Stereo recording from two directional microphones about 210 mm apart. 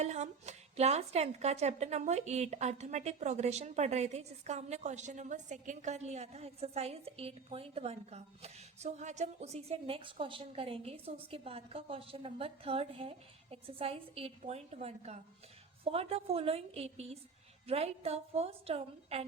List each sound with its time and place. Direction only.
0.0 s a woman's voice: 30° right (ahead or behind)